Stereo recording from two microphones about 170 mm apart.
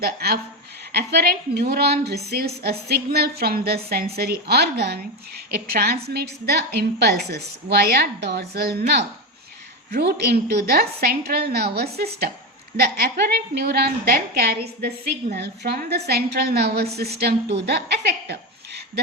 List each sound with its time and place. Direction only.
0.0 s a woman's voice: 65° right (ahead or behind)
9.9 s a woman's voice: 75° right (ahead or behind)